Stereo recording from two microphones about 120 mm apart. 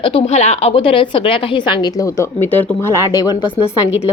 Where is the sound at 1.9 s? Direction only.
25° left (ahead or behind).